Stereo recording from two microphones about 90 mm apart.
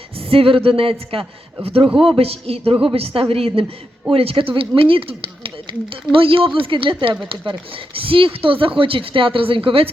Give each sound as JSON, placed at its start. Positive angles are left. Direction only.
{"t": 0.3, "sound": "a woman's voice", "side_deg": -90}